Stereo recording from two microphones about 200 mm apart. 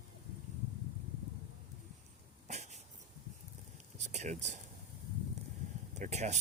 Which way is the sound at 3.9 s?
35° right (ahead or behind).